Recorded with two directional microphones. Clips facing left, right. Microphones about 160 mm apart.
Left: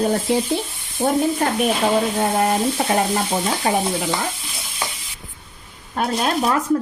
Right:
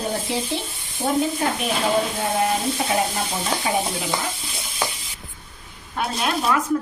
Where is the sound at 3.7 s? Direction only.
55° left (ahead or behind).